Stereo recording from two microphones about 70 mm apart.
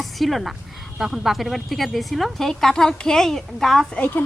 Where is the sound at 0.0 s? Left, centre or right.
Centre.